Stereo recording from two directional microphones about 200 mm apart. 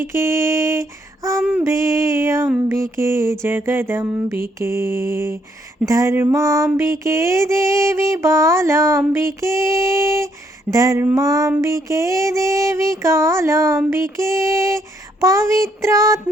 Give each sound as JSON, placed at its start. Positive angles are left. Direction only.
{"t": 0.1, "sound": "female singing", "side_deg": -15}